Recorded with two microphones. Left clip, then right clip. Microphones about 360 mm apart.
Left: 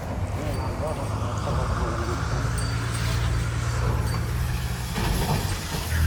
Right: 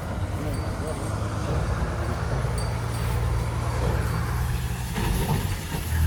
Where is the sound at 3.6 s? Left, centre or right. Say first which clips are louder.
Right 2 dB; right.